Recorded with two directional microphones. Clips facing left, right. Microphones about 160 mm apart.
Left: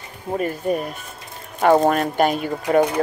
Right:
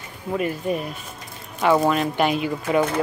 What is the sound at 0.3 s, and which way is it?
Speech, 40° left (ahead or behind).